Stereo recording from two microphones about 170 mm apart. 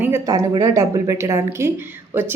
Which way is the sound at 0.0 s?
15° right (ahead or behind).